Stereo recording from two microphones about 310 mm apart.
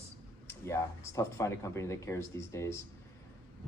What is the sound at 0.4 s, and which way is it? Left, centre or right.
A man's voice, centre.